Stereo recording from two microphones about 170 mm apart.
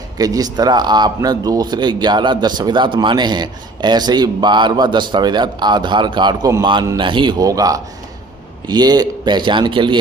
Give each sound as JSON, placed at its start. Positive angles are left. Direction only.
{"t": 0.2, "sound": "speech", "side_deg": -20}